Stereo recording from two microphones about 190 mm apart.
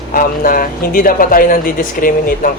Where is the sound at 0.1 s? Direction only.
50° left (ahead or behind).